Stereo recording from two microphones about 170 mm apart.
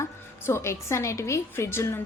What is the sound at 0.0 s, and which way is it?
A woman's voice, 15° left (ahead or behind).